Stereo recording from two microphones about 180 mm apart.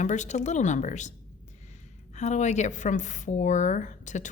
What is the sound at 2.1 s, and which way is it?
A woman's voice, 40° left (ahead or behind).